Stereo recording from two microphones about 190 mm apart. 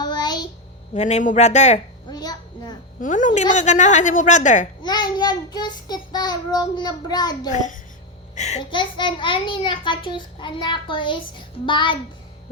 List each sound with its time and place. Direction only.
0.0 s a sound: 20° left (ahead or behind)
0.9 s a woman's voice: 35° left (ahead or behind)
2.0 s a sound: 20° left (ahead or behind)
3.0 s a woman's voice: 45° left (ahead or behind)
4.8 s a child's voice: 20° left (ahead or behind)
7.5 s a woman's voice: 40° left (ahead or behind)
8.7 s a child's voice: 25° left (ahead or behind)